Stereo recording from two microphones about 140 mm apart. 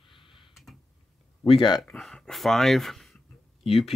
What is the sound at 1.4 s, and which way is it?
Speech, 40° left (ahead or behind).